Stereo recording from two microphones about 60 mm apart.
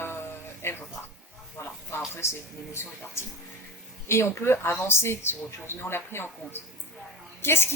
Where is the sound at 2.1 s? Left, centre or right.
Left.